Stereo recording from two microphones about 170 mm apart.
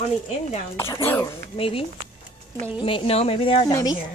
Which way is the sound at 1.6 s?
35° left (ahead or behind).